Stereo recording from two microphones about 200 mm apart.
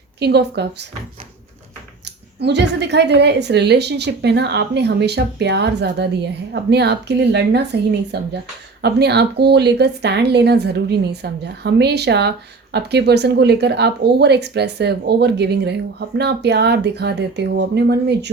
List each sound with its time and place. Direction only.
0.2 s a woman's voice: 55° right (ahead or behind)
2.4 s a woman's voice: 60° right (ahead or behind)